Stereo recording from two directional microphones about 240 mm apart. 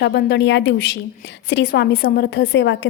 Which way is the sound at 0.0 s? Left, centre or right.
Left.